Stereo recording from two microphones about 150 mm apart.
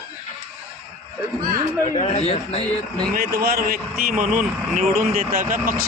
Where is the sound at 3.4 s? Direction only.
85° right; by 5.7 s 65° right (ahead or behind).